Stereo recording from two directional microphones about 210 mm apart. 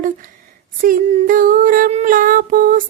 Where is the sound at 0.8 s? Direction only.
40° right (ahead or behind).